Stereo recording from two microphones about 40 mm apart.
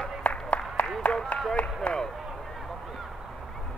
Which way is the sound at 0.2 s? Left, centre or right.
Left.